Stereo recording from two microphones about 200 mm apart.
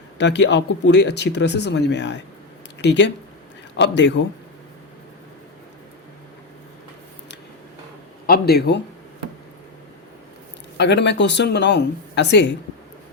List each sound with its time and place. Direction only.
0.2 s speech: 60° left (ahead or behind)
8.3 s speech: 55° left (ahead or behind)
10.8 s speech: 60° left (ahead or behind)